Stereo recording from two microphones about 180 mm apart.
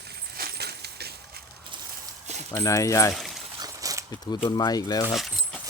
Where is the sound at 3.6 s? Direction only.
20° right (ahead or behind).